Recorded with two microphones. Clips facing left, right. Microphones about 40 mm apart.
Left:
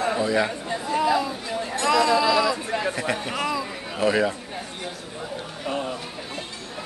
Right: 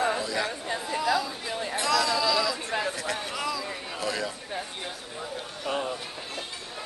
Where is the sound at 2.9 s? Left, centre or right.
Left.